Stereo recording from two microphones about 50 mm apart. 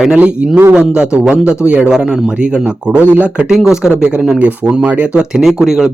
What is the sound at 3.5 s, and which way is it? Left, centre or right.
Speech, centre.